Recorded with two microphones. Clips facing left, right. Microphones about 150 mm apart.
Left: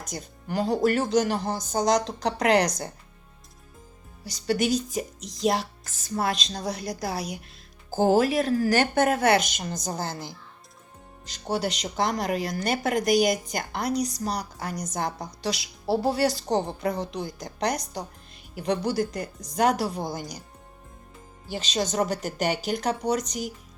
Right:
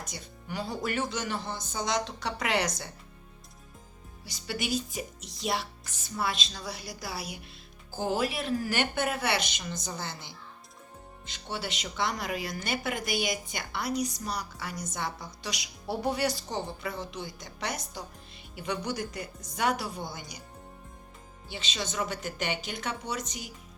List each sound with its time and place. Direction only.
0.0 s a woman's voice: 40° left (ahead or behind)
4.2 s a woman's voice: 40° left (ahead or behind)
21.4 s a woman's voice: 40° left (ahead or behind)